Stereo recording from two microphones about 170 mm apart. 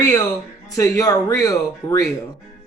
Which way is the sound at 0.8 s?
20° left (ahead or behind).